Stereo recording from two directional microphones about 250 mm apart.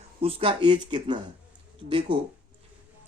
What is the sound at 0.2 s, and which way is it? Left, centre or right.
Speech, right.